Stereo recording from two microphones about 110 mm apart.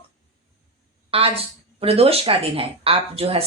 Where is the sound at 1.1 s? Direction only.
60° right (ahead or behind).